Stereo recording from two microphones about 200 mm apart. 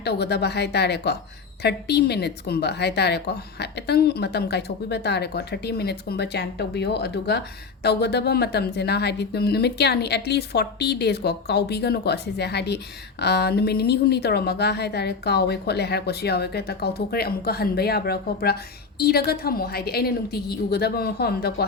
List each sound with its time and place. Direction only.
0.0 s a woman's voice: 55° left (ahead or behind)